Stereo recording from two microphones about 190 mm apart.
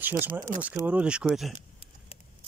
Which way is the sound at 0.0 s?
10° right (ahead or behind).